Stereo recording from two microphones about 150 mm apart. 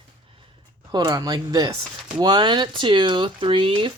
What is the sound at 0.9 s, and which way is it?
Speech, 25° right (ahead or behind).